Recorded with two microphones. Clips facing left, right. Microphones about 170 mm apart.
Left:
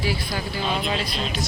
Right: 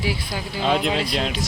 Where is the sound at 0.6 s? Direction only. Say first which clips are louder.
Right 7 dB; 80° right.